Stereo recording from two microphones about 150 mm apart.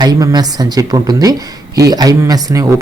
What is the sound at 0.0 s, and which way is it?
Speech, 25° right (ahead or behind).